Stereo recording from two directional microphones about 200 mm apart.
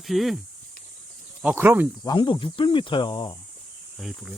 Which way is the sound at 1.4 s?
5° right (ahead or behind).